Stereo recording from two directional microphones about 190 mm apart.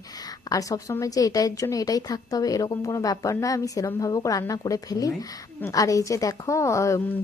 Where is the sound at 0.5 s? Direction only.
15° left (ahead or behind).